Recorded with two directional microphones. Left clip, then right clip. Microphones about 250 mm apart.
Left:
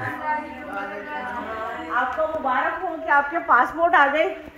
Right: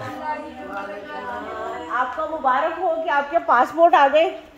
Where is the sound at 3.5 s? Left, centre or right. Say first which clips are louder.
Right 3 dB; right.